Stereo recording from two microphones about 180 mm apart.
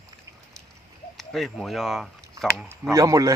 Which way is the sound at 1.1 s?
Centre (ahead or behind).